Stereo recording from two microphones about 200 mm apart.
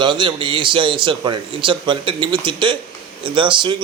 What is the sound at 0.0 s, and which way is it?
A man's voice, 25° right (ahead or behind).